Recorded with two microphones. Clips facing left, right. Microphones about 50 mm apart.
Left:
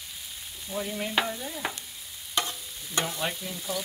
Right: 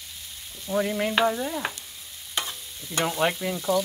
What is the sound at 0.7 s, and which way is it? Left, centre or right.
Frying, right.